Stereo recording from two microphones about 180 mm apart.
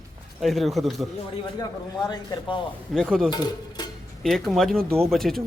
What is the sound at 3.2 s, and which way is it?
Speech, 20° left (ahead or behind).